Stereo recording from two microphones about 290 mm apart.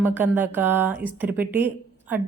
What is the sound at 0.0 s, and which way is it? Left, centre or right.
A woman's voice, centre.